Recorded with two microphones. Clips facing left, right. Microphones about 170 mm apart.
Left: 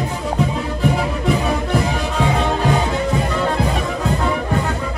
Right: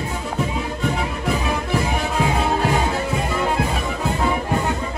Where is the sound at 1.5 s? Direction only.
Centre (ahead or behind).